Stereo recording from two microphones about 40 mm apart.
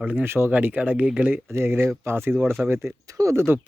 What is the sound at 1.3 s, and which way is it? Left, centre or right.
Speech, right.